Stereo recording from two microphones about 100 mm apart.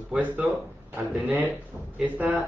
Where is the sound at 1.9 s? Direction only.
15° right (ahead or behind).